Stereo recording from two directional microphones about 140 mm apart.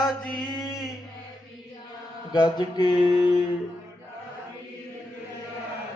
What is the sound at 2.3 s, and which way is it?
Mantra, 30° left (ahead or behind).